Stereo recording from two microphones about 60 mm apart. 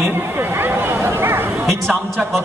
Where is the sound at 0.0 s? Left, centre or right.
Right.